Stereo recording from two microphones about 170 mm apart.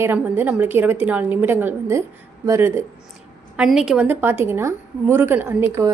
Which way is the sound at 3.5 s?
5° right (ahead or behind).